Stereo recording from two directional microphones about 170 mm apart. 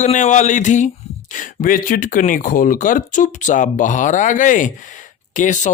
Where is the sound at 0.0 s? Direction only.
45° left (ahead or behind).